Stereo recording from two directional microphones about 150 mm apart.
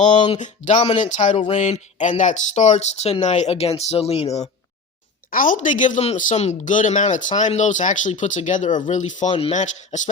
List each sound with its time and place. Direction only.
0.1 s speech: 30° left (ahead or behind)
0.3 s speech: 55° left (ahead or behind)
0.8 s speech: 35° left (ahead or behind)
1.0 s speech: 55° left (ahead or behind)
5.3 s speech: 65° left (ahead or behind)